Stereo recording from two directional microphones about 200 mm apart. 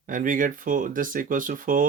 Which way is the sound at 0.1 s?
40° right (ahead or behind).